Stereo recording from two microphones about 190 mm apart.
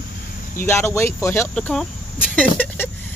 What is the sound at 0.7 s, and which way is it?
Speech, 15° left (ahead or behind).